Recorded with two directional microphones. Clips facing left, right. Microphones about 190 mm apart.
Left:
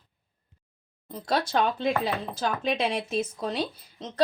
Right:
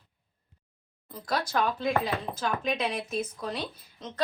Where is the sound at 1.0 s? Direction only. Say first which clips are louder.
Left 4 dB; 25° left (ahead or behind).